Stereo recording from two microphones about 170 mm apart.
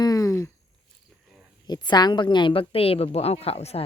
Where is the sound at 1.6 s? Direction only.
25° left (ahead or behind).